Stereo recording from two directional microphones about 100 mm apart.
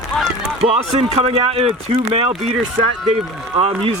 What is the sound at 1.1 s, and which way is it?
Speech, 90° right.